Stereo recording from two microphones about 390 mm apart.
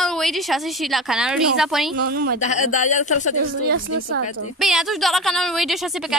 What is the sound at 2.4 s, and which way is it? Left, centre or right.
Speech, centre.